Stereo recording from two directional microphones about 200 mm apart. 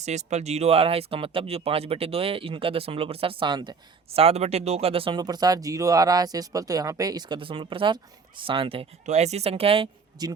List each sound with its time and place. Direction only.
0.0 s speech: 35° right (ahead or behind)